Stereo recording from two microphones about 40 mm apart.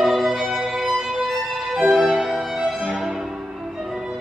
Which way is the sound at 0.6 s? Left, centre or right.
Centre.